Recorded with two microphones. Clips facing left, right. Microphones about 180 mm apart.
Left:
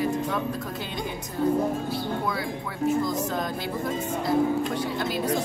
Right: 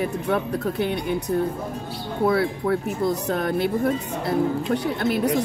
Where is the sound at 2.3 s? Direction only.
60° right (ahead or behind).